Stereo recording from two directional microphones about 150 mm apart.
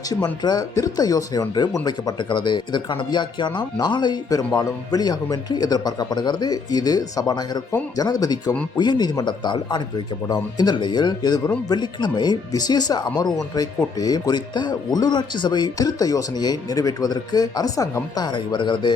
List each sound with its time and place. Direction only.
0.1 s speech: 25° left (ahead or behind)